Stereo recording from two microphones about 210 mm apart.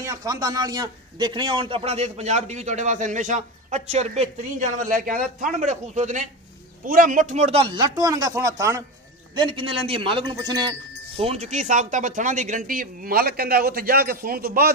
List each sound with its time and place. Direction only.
0.0 s a man's voice: 15° right (ahead or behind); by 14.7 s 45° right (ahead or behind)